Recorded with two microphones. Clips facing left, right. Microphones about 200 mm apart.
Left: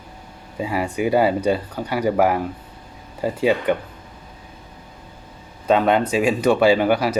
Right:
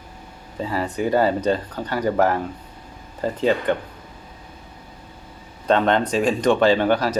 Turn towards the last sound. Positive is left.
turn(degrees=10)  # may be behind; listen again after turning